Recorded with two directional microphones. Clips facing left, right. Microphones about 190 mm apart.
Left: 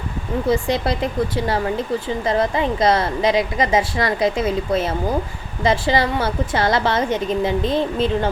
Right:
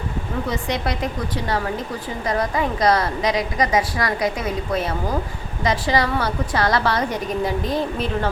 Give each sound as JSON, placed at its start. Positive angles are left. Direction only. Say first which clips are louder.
{"t": 0.5, "sound": "a woman's voice", "louder": "left 6 dB", "side_deg": 30}
{"t": 2.2, "sound": "a woman's voice", "louder": "left 1 dB", "side_deg": 25}